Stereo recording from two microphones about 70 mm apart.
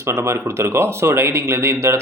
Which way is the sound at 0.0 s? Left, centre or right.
Right.